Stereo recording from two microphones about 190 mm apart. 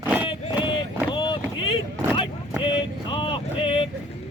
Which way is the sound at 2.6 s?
25° left (ahead or behind).